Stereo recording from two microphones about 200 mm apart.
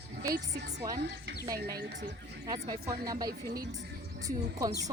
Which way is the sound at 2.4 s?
20° right (ahead or behind).